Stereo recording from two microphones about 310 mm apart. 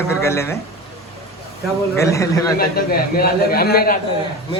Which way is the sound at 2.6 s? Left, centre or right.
Left.